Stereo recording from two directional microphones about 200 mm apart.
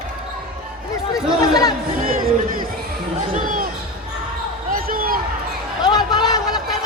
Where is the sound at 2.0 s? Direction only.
45° right (ahead or behind).